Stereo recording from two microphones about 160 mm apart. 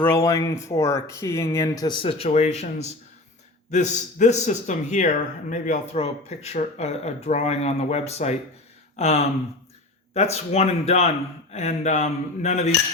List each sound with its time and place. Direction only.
0.0 s speech: 15° left (ahead or behind); by 8.4 s 45° left (ahead or behind)
9.0 s a sound: 40° left (ahead or behind)
10.3 s speech: 40° left (ahead or behind)